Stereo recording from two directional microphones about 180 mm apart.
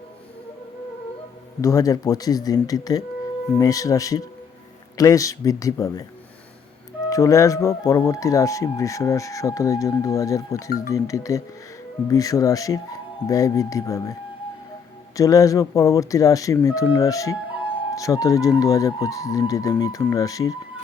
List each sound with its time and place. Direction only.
1.6 s speech: 20° left (ahead or behind)
7.1 s speech: 20° left (ahead or behind)